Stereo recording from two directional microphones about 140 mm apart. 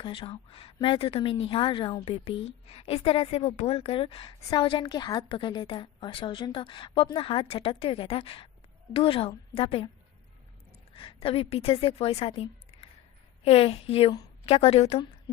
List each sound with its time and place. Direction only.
0.0 s a woman's voice: 40° left (ahead or behind)
10.9 s a woman's voice: 40° left (ahead or behind)